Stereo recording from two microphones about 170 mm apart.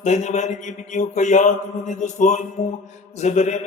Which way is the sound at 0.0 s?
45° left (ahead or behind).